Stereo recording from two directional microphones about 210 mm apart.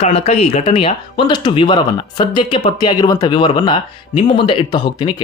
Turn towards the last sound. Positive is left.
turn(degrees=20)  # may be behind; listen again after turning